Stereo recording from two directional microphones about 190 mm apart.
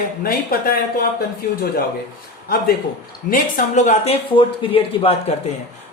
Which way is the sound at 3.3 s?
40° left (ahead or behind).